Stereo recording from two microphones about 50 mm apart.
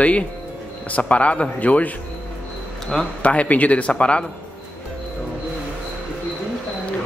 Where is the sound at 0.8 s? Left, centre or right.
Left.